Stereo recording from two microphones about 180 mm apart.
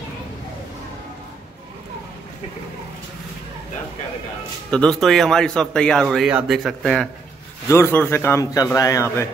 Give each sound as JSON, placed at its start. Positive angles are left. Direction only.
{"t": 4.6, "sound": "a man's voice", "side_deg": 5}